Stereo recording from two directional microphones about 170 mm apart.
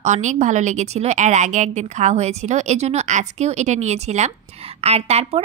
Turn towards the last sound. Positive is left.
turn(degrees=-35)  # may be behind; listen again after turning